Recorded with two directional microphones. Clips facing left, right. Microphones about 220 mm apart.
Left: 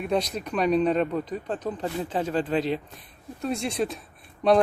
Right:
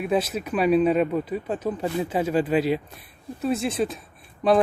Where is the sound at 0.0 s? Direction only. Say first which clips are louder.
Right 2 dB; 5° right (ahead or behind).